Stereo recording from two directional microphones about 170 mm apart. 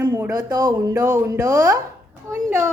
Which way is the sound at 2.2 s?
15° right (ahead or behind).